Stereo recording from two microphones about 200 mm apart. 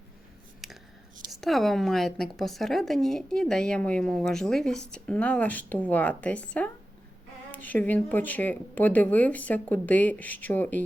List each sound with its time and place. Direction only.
0.6 s scissors: centre (ahead or behind)
1.3 s speech: centre (ahead or behind)